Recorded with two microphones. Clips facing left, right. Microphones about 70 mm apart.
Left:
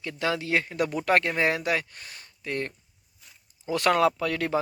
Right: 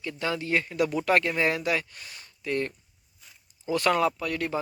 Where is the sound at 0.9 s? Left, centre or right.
Left.